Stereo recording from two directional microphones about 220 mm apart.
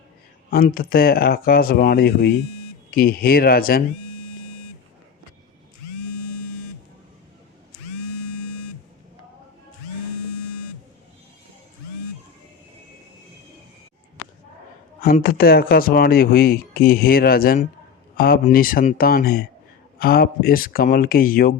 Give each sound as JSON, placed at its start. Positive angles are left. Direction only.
{"t": 0.5, "sound": "speech", "side_deg": 45}
{"t": 15.0, "sound": "speech", "side_deg": 40}